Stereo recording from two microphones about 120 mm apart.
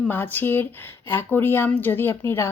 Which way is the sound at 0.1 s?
15° left (ahead or behind).